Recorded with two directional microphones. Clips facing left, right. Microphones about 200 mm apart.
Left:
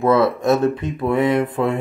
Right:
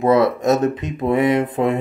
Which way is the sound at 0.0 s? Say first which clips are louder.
Right 1 dB; 20° right (ahead or behind).